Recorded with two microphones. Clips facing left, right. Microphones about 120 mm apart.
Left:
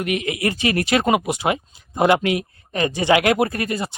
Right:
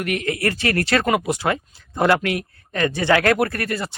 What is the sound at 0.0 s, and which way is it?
Speech, 20° left (ahead or behind).